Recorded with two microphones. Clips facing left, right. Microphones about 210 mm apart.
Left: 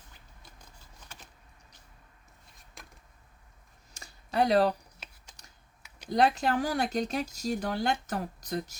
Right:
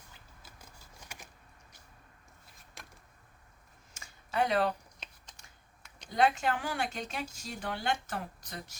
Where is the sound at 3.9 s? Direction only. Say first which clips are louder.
Left 3 dB; 35° left (ahead or behind).